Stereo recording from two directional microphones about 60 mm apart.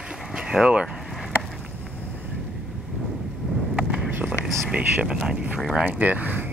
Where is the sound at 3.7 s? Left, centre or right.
Centre.